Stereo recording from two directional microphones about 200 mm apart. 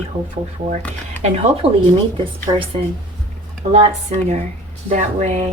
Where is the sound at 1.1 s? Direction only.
35° right (ahead or behind).